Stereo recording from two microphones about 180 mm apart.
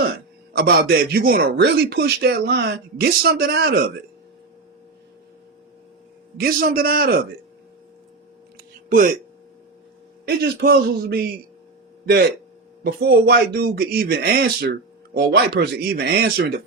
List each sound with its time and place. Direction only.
0.5 s speech: 60° right (ahead or behind)
6.4 s speech: 55° right (ahead or behind)
10.2 s speech: 65° right (ahead or behind)
12.8 s speech: 60° right (ahead or behind)